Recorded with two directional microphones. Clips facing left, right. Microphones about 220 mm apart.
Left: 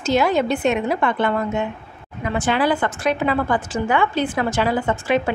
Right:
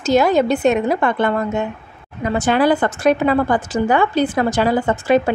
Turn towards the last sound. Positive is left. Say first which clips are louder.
# right 4 dB
turn(degrees=-40)  # may be behind; listen again after turning